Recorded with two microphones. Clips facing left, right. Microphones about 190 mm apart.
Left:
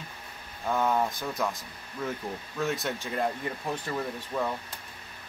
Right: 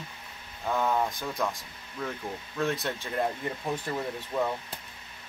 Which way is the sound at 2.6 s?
Centre (ahead or behind).